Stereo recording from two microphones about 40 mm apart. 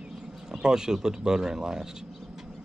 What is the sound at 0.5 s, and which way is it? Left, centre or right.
Speech, centre.